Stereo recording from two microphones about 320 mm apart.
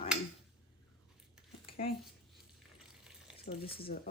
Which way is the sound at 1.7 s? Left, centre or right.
Centre.